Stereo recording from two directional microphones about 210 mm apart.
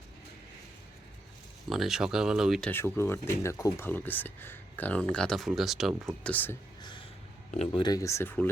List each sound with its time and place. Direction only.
1.7 s speech: centre (ahead or behind)
7.5 s speech: 25° left (ahead or behind); by 8.4 s 10° left (ahead or behind)